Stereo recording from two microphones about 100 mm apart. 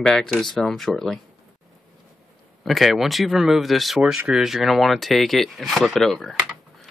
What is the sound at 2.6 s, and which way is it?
Speech, centre (ahead or behind).